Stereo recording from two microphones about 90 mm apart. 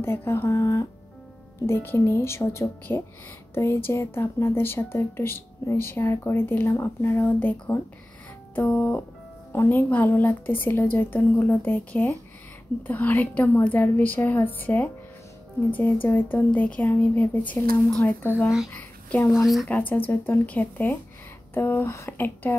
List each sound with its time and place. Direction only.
0.0 s speech: 25° left (ahead or behind)
13.4 s speech: 30° left (ahead or behind)
13.7 s speech: 20° left (ahead or behind)
19.2 s speech: centre (ahead or behind)
19.7 s speech: 20° left (ahead or behind)